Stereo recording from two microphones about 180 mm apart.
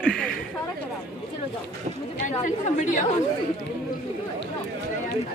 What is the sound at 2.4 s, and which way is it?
Speech, 45° left (ahead or behind).